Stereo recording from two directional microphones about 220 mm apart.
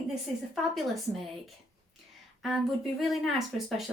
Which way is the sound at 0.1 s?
Centre (ahead or behind).